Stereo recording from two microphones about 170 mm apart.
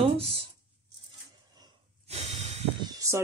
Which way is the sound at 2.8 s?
20° right (ahead or behind).